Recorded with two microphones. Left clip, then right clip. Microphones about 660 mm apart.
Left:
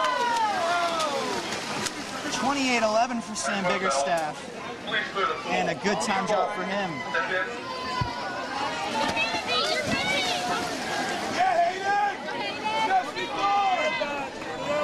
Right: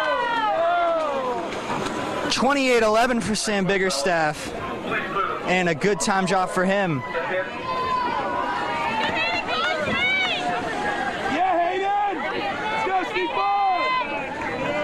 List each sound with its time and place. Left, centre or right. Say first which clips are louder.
2.5 s speech: right 4 dB; right
5.7 s speech: right 4 dB; right